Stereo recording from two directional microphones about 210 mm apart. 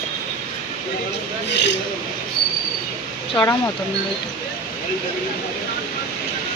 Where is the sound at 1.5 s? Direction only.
55° left (ahead or behind).